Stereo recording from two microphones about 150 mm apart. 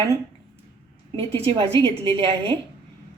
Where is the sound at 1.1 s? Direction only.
40° right (ahead or behind).